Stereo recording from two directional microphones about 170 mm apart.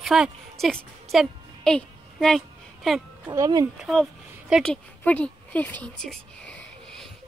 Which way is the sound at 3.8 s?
Centre (ahead or behind).